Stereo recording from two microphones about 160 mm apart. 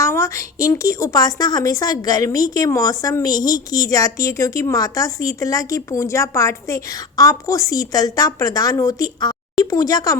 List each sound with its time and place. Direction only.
0.0 s a woman's voice: 20° left (ahead or behind)